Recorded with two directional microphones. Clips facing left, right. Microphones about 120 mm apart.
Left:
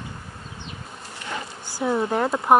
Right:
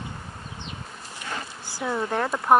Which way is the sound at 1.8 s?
20° left (ahead or behind).